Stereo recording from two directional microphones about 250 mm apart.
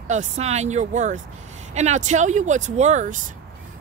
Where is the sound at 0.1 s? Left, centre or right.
Right.